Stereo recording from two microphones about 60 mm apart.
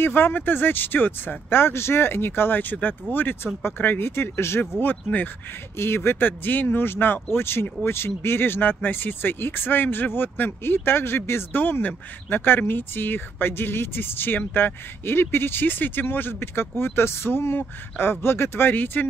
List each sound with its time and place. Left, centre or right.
0.0 s speech: left